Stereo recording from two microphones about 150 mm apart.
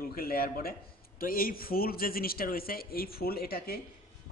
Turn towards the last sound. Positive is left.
turn(degrees=90)